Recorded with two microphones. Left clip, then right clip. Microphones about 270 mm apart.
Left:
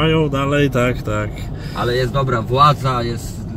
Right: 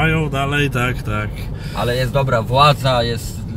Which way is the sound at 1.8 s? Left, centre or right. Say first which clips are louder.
Even; right.